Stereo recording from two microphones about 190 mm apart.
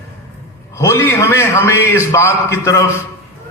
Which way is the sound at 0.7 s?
15° left (ahead or behind).